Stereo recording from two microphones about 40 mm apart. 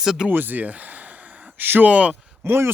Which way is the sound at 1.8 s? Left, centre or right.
Right.